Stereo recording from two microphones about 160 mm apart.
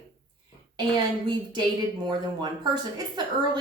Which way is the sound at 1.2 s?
30° right (ahead or behind).